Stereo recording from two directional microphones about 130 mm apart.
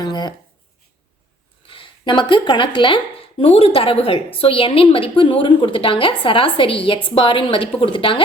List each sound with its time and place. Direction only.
0.0 s speech: 35° left (ahead or behind)
1.6 s speech: 40° left (ahead or behind)